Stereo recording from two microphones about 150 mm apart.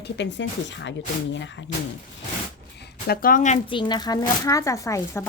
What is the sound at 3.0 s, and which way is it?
Speech, 80° left.